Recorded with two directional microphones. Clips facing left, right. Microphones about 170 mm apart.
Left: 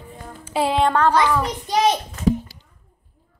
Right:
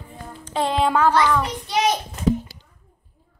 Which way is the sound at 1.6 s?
35° left (ahead or behind).